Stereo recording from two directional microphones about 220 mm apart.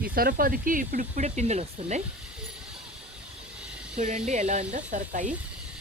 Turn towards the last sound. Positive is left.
turn(degrees=-35)  # may be behind; listen again after turning